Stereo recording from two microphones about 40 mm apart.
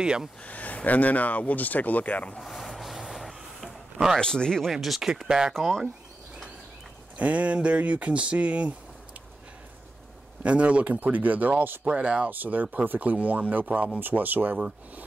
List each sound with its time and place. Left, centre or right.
0.4 s speech: left
2.5 s a sound: centre
4.2 s speech: centre
5.0 s speech: centre
5.5 s speech: centre
7.2 s speech: right
10.4 s speech: right
11.9 s speech: right
12.3 s speech: right
13.9 s speech: right